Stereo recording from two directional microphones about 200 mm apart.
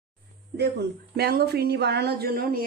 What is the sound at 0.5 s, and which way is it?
Speech, 55° right (ahead or behind).